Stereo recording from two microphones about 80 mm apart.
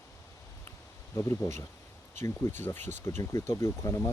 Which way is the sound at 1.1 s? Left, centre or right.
Left.